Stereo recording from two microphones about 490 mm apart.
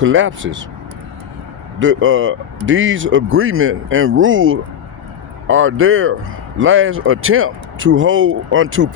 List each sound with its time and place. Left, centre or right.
0.0 s speech: right
1.8 s speech: right